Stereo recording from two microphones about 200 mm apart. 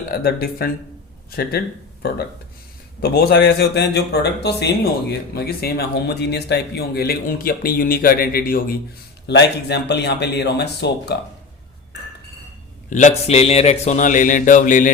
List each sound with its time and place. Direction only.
0.1 s speech: 50° left (ahead or behind)
9.2 s speech: 60° left (ahead or behind)
12.9 s speech: 35° left (ahead or behind)